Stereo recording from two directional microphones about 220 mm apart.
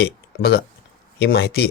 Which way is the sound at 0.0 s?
45° left (ahead or behind).